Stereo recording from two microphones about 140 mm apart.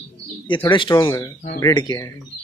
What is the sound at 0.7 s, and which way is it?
Speech, 35° left (ahead or behind).